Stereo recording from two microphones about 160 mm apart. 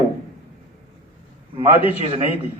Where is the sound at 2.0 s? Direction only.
35° right (ahead or behind).